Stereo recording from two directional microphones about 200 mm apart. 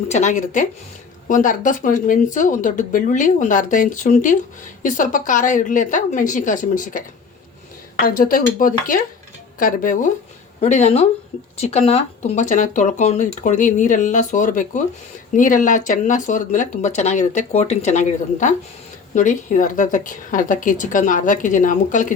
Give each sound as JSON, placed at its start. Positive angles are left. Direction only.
{"t": 0.1, "sound": "speech", "side_deg": 35}
{"t": 8.0, "sound": "speech", "side_deg": 45}